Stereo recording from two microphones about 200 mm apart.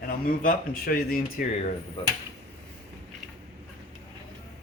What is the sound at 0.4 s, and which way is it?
Speech, 45° left (ahead or behind).